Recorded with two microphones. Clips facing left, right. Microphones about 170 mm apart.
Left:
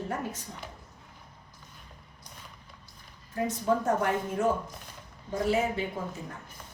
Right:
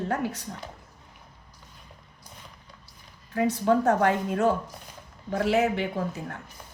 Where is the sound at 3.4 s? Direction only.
70° right (ahead or behind).